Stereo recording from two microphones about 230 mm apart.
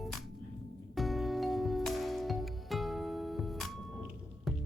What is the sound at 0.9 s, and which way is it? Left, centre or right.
Music, centre.